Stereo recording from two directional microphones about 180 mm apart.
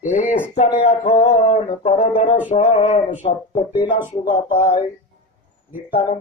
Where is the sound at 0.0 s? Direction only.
45° left (ahead or behind).